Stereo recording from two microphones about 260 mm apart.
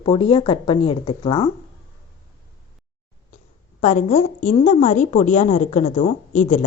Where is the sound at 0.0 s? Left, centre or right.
Centre.